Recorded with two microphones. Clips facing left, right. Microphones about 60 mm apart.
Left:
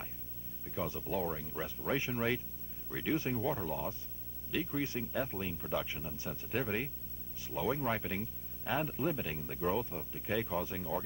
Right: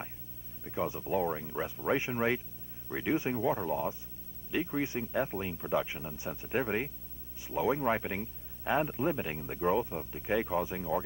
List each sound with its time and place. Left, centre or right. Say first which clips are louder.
0.7 s speech: right 5 dB; right